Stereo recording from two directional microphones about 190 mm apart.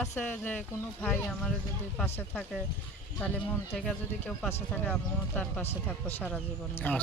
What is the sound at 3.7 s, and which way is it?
Speech, 5° left (ahead or behind).